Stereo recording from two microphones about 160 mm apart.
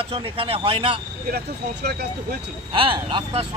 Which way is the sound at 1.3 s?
80° right.